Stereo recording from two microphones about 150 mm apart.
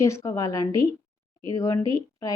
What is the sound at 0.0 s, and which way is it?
Speech, 20° left (ahead or behind).